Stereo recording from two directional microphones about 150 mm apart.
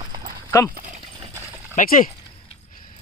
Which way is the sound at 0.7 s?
65° right (ahead or behind).